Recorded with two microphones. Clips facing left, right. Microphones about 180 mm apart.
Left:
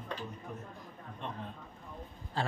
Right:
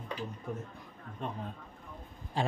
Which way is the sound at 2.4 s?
15° right (ahead or behind).